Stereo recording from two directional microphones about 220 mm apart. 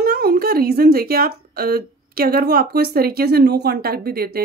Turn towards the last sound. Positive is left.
turn(degrees=-45)  # may be behind; listen again after turning